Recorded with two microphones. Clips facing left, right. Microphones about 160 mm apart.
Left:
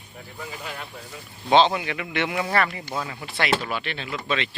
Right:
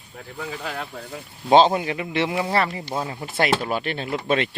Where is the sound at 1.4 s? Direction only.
40° right (ahead or behind).